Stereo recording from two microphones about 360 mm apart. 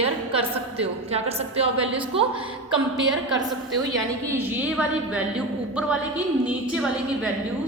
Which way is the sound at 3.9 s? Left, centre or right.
Centre.